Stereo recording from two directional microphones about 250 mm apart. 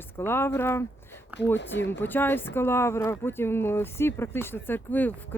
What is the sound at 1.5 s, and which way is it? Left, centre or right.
Speech, left.